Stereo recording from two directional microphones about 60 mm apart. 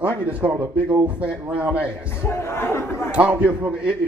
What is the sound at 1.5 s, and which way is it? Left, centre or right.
Speech, right.